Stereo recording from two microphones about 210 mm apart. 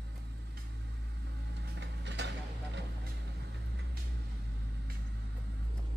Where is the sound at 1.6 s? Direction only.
55° right (ahead or behind).